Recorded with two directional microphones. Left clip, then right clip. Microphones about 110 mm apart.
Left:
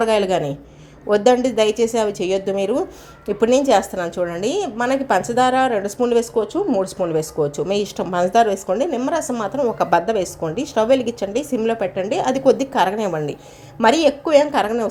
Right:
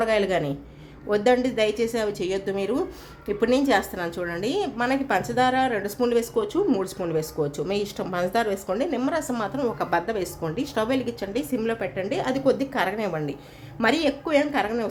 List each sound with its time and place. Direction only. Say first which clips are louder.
0.0 s a woman's voice: left 5 dB; 25° left (ahead or behind); by 6.8 s 5° left (ahead or behind)
6.8 s a woman's voice: left 6 dB; 20° left (ahead or behind)
9.7 s a woman's voice: left 8 dB; 30° left (ahead or behind)
10.4 s a woman's voice: left 7 dB; 15° left (ahead or behind)